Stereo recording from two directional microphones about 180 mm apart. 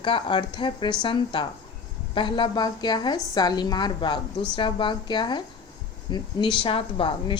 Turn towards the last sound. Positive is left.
turn(degrees=30)  # may be behind; listen again after turning